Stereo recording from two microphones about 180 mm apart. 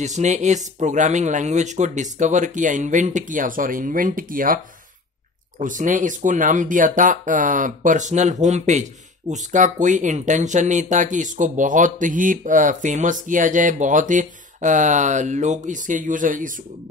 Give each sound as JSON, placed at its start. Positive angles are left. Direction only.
{"t": 0.0, "sound": "speech", "side_deg": -40}
{"t": 5.6, "sound": "speech", "side_deg": -45}